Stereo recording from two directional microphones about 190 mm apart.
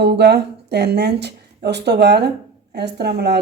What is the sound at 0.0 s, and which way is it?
A woman's voice, 60° right (ahead or behind).